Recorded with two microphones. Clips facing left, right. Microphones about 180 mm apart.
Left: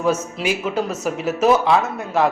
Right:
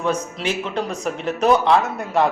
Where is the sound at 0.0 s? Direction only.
5° left (ahead or behind).